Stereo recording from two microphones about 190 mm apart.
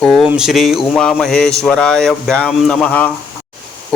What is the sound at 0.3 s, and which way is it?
Speech, 5° right (ahead or behind).